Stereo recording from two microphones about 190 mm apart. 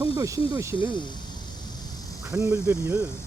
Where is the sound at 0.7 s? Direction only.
25° left (ahead or behind).